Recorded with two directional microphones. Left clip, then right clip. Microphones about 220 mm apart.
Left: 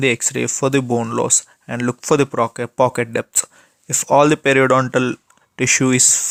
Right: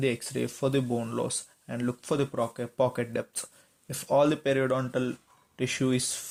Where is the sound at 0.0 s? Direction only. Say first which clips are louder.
Left 12 dB; 30° left (ahead or behind).